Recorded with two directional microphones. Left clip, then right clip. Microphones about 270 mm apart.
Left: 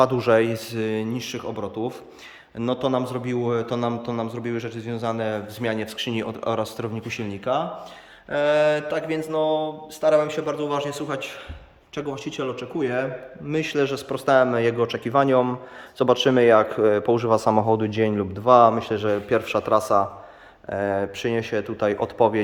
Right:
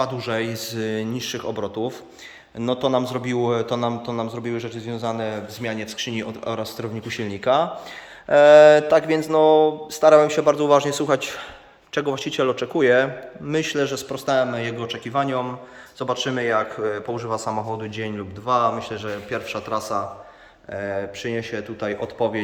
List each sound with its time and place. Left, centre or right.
0.0 s a man's voice: centre
8.3 s a man's voice: centre; by 22.4 s left